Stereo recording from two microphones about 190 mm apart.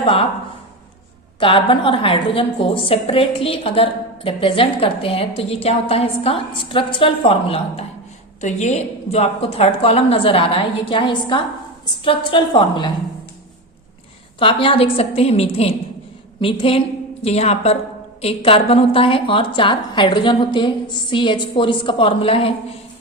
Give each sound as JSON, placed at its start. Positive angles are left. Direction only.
{"t": 0.0, "sound": "speech", "side_deg": 30}
{"t": 1.4, "sound": "a woman's voice", "side_deg": 25}
{"t": 14.3, "sound": "a woman's voice", "side_deg": 25}